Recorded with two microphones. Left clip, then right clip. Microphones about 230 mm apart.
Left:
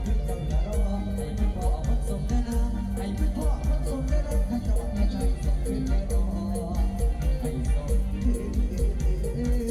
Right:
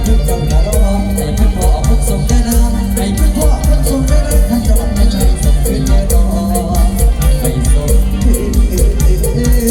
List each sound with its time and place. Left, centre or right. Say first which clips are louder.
4.5 s music: right 15 dB; right